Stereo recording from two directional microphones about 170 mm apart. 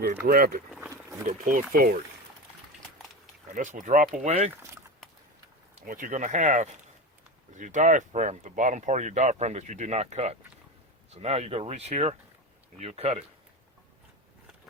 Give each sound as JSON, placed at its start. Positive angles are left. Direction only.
{"t": 0.3, "sound": "speech", "side_deg": -60}
{"t": 0.7, "sound": "a sound", "side_deg": -10}
{"t": 1.3, "sound": "speech", "side_deg": -50}
{"t": 3.5, "sound": "speech", "side_deg": -50}
{"t": 5.8, "sound": "speech", "side_deg": -50}